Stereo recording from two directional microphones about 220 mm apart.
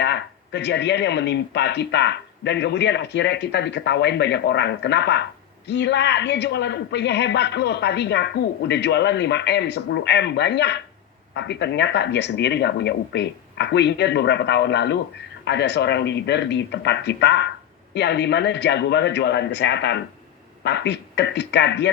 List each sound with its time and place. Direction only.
0.0 s speech: 50° left (ahead or behind)